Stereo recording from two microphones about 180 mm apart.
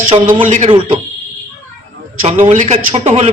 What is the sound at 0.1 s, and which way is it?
Speech, 30° right (ahead or behind).